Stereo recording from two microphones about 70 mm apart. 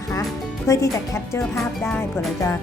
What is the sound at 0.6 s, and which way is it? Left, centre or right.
Speech, left.